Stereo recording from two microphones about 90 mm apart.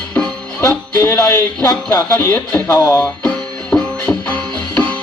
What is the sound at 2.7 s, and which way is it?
Speech, 40° left (ahead or behind).